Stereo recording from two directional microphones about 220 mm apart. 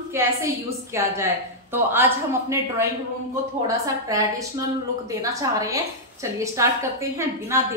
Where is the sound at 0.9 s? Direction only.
10° right (ahead or behind).